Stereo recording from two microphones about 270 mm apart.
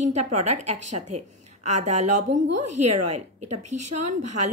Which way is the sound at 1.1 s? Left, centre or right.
Right.